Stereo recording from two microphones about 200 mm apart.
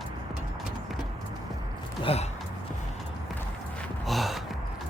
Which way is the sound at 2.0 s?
30° left (ahead or behind).